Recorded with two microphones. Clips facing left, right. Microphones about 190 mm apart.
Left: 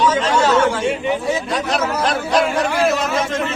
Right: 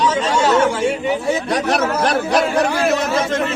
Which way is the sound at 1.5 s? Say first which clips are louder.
Right 2 dB; 65° right (ahead or behind).